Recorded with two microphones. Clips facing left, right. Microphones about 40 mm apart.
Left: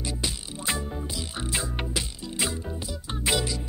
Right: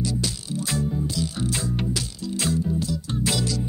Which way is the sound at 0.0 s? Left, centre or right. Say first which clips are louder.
Right 5 dB; left.